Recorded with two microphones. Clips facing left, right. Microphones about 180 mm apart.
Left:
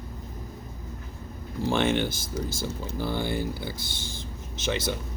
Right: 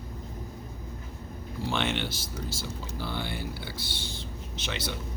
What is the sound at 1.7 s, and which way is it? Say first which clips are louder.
Speech: left 6 dB; 45° left (ahead or behind).